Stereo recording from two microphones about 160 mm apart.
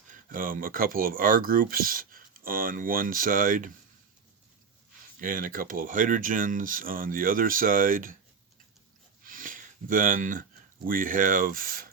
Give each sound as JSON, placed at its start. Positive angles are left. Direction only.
{"t": 0.1, "sound": "speech", "side_deg": -55}
{"t": 5.2, "sound": "speech", "side_deg": -60}
{"t": 9.2, "sound": "a sound", "side_deg": -60}
{"t": 10.8, "sound": "speech", "side_deg": -60}